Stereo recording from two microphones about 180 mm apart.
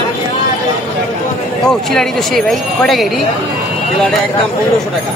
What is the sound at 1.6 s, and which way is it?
Speech, centre (ahead or behind).